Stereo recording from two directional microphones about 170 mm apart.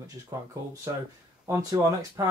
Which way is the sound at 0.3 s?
20° right (ahead or behind).